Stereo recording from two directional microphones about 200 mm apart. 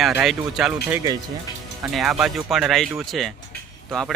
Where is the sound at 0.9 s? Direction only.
20° right (ahead or behind).